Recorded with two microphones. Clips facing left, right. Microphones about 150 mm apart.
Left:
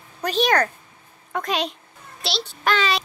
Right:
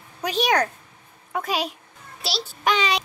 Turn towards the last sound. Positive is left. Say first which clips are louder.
# even
turn(degrees=-15)  # may be behind; listen again after turning